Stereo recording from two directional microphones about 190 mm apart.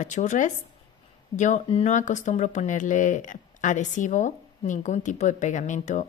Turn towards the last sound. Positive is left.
turn(degrees=40)  # may be behind; listen again after turning